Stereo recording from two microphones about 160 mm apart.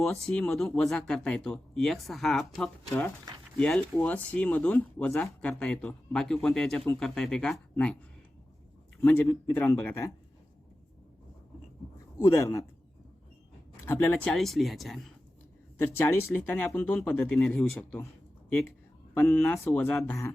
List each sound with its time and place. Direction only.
0.0 s speech: 5° left (ahead or behind)
2.8 s speech: 15° left (ahead or behind)
9.0 s speech: 10° left (ahead or behind)
12.2 s speech: 20° left (ahead or behind)
13.8 s speech: 15° left (ahead or behind)
14.3 s speech: centre (ahead or behind)
15.8 s a man's voice: 15° left (ahead or behind)